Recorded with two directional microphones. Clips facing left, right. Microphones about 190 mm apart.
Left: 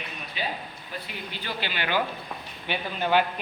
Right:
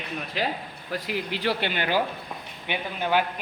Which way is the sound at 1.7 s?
40° right (ahead or behind).